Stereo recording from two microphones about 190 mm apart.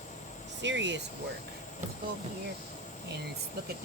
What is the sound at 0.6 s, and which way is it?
Speech, 70° right (ahead or behind).